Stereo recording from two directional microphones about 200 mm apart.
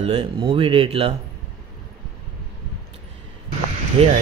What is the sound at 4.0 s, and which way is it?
Speech, 30° right (ahead or behind).